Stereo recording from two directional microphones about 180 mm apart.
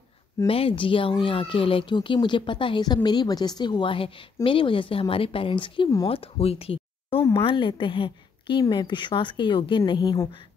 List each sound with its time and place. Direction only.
0.5 s speech: 30° left (ahead or behind)